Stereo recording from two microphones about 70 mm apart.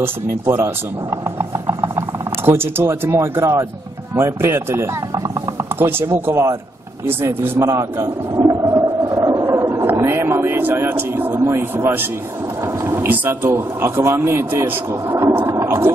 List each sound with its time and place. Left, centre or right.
0.0 s speech: right
7.5 s a man's voice: right
8.4 s whale vocalization: right
9.1 s a sound: right
9.9 s speech: right
15.5 s a sound: right